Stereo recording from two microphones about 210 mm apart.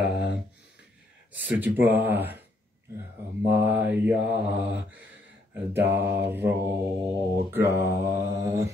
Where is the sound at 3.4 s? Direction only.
10° right (ahead or behind).